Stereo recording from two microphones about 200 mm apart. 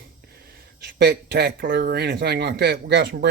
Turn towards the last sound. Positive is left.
turn(degrees=-55)  # may be behind; listen again after turning